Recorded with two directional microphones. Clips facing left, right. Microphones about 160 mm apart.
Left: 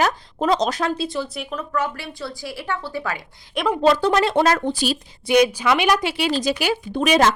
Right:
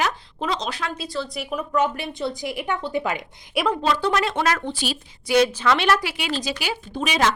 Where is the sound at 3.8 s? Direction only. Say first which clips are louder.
Left 5 dB; 40° left (ahead or behind).